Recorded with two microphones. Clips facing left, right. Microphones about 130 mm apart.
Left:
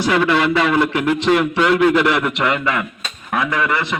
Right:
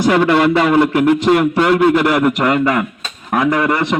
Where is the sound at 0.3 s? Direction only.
45° right (ahead or behind).